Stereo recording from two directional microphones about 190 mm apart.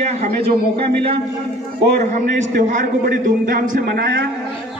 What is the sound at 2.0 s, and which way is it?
A man's voice, 40° right (ahead or behind).